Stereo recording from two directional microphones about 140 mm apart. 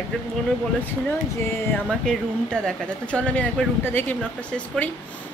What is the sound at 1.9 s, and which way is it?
Speech, 5° left (ahead or behind).